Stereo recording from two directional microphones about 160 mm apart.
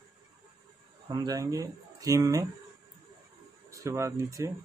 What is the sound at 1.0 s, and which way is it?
Speech, 25° right (ahead or behind).